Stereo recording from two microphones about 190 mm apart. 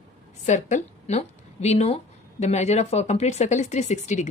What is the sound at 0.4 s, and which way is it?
A woman's voice, 40° left (ahead or behind).